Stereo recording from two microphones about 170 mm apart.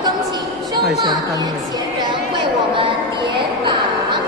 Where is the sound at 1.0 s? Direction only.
20° right (ahead or behind).